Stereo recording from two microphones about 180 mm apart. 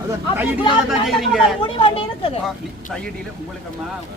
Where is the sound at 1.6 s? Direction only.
30° left (ahead or behind).